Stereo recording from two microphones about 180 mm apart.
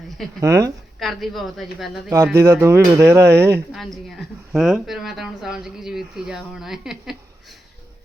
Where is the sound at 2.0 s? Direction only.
15° right (ahead or behind).